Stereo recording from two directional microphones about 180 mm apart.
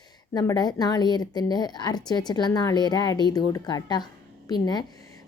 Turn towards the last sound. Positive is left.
turn(degrees=20)  # may be behind; listen again after turning